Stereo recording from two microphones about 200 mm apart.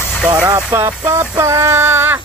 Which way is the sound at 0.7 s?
15° right (ahead or behind).